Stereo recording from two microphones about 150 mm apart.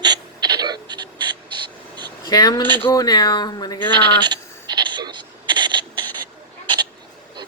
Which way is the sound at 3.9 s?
30° right (ahead or behind).